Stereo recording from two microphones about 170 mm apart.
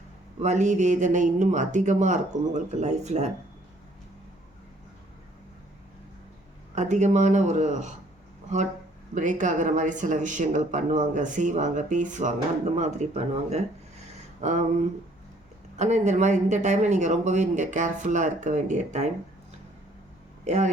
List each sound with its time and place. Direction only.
0.3 s speech: 45° right (ahead or behind)
6.7 s speech: 45° right (ahead or behind)
9.1 s speech: 45° right (ahead or behind)
15.8 s speech: 45° right (ahead or behind)
20.5 s speech: 40° right (ahead or behind)